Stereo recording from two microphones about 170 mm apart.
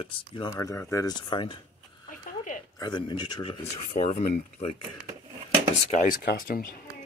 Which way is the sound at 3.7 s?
40° left (ahead or behind).